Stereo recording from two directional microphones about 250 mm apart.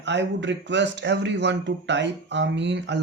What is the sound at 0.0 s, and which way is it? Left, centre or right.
Speech, right.